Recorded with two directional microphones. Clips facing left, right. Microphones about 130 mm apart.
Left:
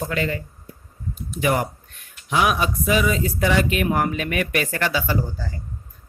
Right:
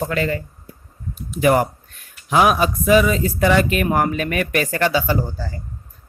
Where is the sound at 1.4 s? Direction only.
50° right (ahead or behind).